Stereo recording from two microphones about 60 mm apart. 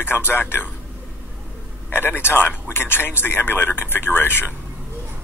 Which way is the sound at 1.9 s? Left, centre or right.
Left.